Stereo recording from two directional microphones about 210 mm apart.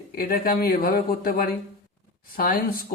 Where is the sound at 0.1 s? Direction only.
45° left (ahead or behind).